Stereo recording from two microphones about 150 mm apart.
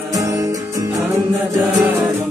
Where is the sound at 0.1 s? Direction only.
25° right (ahead or behind).